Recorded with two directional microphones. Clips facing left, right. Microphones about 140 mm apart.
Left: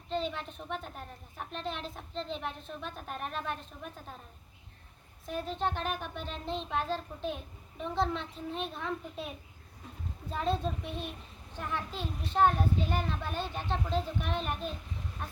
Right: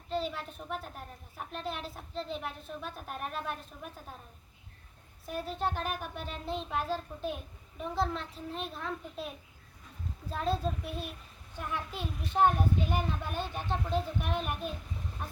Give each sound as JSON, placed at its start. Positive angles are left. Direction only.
{"t": 0.1, "sound": "a woman's voice", "side_deg": -5}
{"t": 5.2, "sound": "a woman's voice", "side_deg": -10}